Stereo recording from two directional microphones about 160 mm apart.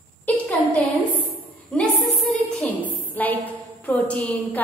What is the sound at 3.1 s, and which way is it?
A woman's voice, 10° left (ahead or behind).